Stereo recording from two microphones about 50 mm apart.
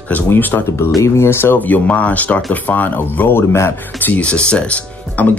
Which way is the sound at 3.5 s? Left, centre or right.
Left.